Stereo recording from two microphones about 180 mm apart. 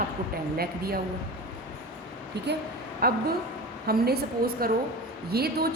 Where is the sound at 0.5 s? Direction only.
60° right (ahead or behind).